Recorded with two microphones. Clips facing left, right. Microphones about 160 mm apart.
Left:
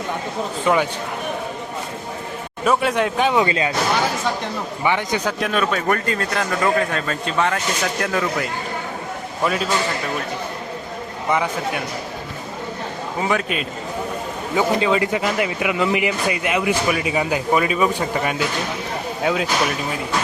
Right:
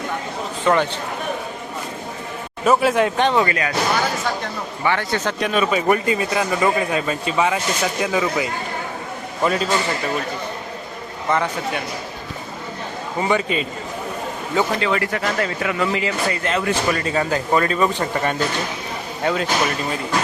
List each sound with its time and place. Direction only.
0.6 s speech: 10° left (ahead or behind)
2.6 s speech: centre (ahead or behind)
3.3 s speech: 20° left (ahead or behind)
4.8 s speech: 15° left (ahead or behind)
5.4 s speech: centre (ahead or behind)
11.3 s speech: 10° left (ahead or behind)
13.1 s speech: centre (ahead or behind)
14.5 s speech: 20° left (ahead or behind)